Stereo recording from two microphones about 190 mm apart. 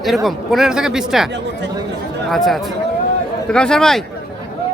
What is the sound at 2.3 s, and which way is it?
Speech, centre (ahead or behind).